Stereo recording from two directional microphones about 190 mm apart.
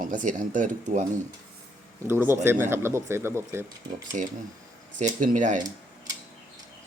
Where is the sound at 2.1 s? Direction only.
10° right (ahead or behind).